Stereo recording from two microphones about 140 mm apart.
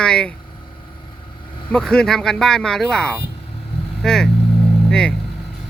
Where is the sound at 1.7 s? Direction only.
5° left (ahead or behind).